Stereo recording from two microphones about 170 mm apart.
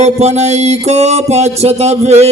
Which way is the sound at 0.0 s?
40° right (ahead or behind).